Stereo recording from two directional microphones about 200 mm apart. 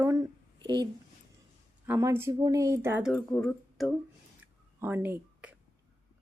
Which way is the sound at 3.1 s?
5° left (ahead or behind).